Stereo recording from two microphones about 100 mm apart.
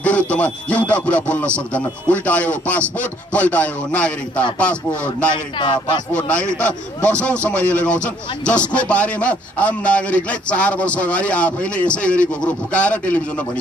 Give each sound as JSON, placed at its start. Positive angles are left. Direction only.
{"t": 0.0, "sound": "a man's voice", "side_deg": 15}
{"t": 5.3, "sound": "speech", "side_deg": 50}
{"t": 6.1, "sound": "a man's voice", "side_deg": 10}